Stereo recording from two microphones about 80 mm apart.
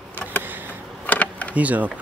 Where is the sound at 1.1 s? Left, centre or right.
Centre.